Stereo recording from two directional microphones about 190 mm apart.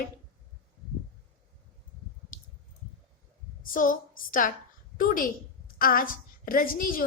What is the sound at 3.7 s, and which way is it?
A woman's voice, 45° left (ahead or behind).